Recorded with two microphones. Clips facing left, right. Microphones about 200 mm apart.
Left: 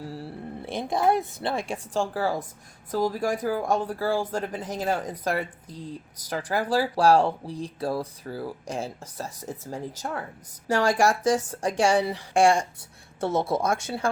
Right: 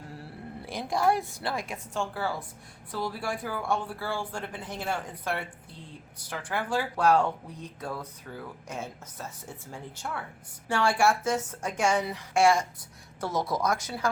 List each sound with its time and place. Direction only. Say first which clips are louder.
0.1 s a woman's voice: left 6 dB; 25° left (ahead or behind)